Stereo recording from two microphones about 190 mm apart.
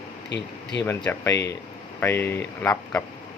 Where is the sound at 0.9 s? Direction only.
10° left (ahead or behind).